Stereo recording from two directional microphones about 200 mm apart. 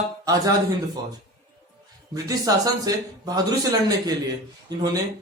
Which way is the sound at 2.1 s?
15° right (ahead or behind).